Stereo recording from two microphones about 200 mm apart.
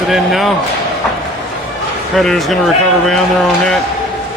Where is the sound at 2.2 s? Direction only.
Centre (ahead or behind).